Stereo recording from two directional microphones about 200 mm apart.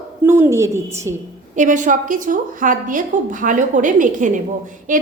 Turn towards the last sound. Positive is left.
turn(degrees=-40)  # may be behind; listen again after turning